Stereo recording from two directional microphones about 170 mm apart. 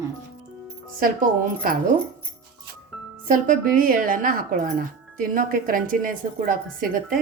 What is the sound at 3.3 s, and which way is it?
Speech, 55° right (ahead or behind).